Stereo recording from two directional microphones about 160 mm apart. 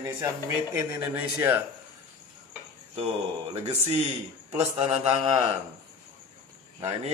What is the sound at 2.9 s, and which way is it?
Speech, 35° right (ahead or behind).